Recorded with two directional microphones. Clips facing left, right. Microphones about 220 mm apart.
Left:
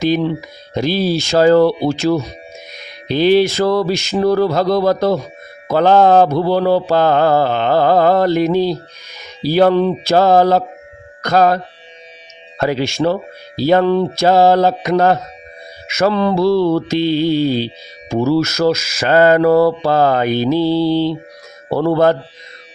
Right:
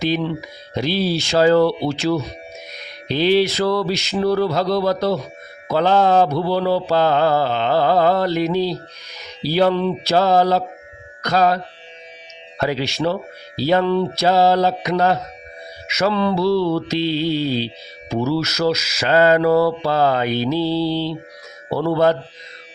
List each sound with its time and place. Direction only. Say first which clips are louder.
0.0 s speech: left 5 dB; 45° left (ahead or behind)